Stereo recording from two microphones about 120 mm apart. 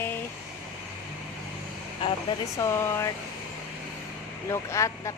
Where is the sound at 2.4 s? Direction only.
25° left (ahead or behind).